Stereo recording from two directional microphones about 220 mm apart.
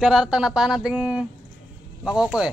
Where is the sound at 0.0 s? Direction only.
5° right (ahead or behind).